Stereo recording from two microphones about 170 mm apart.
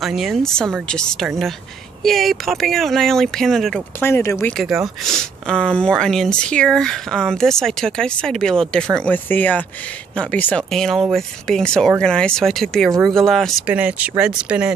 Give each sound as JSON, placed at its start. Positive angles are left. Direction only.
{"t": 0.0, "sound": "speech", "side_deg": 0}
{"t": 4.0, "sound": "speech", "side_deg": 15}
{"t": 4.6, "sound": "speech", "side_deg": 0}
{"t": 13.7, "sound": "speech", "side_deg": -10}